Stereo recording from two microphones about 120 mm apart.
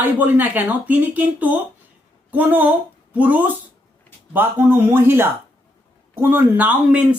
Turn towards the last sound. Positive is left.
turn(degrees=-10)  # may be behind; listen again after turning